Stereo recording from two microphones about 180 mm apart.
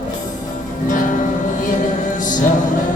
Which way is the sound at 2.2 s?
45° left (ahead or behind).